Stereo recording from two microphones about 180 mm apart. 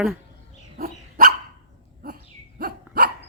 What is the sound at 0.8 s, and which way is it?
Dog, 55° right (ahead or behind).